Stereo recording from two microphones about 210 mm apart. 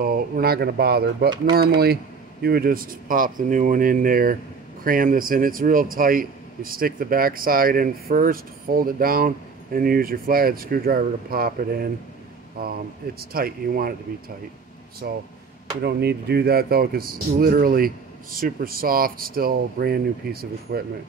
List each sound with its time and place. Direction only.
0.0 s a man's voice: 45° right (ahead or behind)
2.4 s a man's voice: 45° right (ahead or behind)
13.2 s a man's voice: 45° right (ahead or behind)
15.0 s a man's voice: 50° right (ahead or behind)